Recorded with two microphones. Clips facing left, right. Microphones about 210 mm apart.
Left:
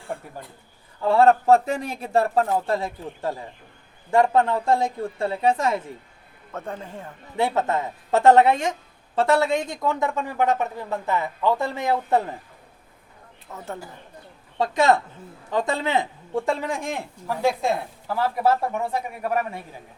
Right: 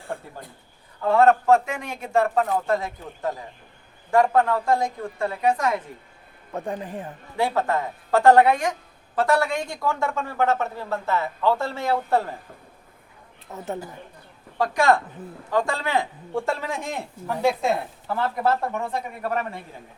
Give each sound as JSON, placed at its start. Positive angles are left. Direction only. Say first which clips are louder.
{"t": 1.0, "sound": "a woman's voice", "louder": "left 1 dB", "side_deg": 30}
{"t": 6.5, "sound": "speech", "louder": "right 3 dB", "side_deg": -15}
{"t": 7.3, "sound": "a woman's voice", "louder": "even", "side_deg": 20}
{"t": 13.5, "sound": "speech", "louder": "right 4 dB", "side_deg": -20}
{"t": 14.6, "sound": "a woman's voice", "louder": "left 1 dB", "side_deg": 20}
{"t": 16.3, "sound": "speech", "louder": "left 2 dB", "side_deg": 0}